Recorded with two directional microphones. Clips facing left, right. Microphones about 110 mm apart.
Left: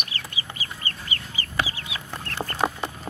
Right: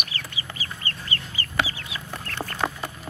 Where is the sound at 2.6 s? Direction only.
20° left (ahead or behind).